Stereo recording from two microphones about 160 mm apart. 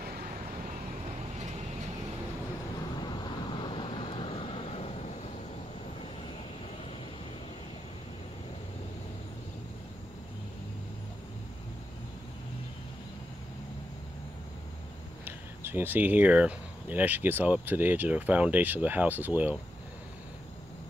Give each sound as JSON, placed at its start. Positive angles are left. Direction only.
{"t": 3.5, "sound": "vehicle", "side_deg": 30}
{"t": 15.2, "sound": "speech", "side_deg": -15}